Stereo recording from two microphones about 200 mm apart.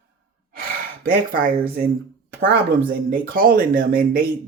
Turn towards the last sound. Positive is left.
turn(degrees=-45)  # may be behind; listen again after turning